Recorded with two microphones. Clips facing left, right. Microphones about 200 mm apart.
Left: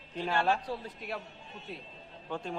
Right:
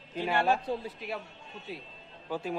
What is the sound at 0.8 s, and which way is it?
A man's voice, centre (ahead or behind).